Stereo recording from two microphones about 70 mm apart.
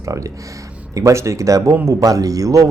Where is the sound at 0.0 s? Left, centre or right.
Right.